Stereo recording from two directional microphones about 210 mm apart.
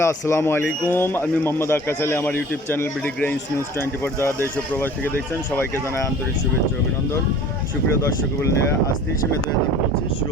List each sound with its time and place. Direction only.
0.0 s speech: 10° left (ahead or behind)